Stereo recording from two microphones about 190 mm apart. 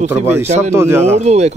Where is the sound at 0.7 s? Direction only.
15° right (ahead or behind).